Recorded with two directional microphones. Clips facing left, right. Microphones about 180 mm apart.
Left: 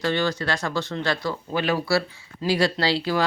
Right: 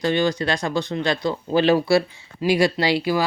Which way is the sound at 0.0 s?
15° right (ahead or behind).